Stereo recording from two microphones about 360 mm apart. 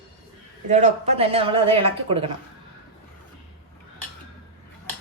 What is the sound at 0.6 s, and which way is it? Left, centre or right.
Speech, centre.